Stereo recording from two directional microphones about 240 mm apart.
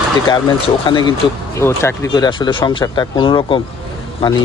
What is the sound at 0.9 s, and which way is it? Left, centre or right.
A man's voice, centre.